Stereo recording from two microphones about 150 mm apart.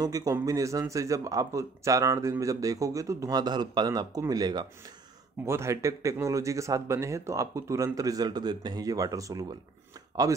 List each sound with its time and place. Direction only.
0.0 s speech: 25° right (ahead or behind)